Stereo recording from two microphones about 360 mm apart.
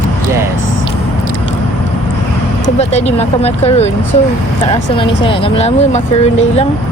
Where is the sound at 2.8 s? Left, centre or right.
Centre.